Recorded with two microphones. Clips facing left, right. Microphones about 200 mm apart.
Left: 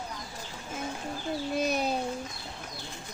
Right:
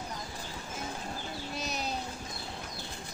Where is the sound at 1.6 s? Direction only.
55° left (ahead or behind).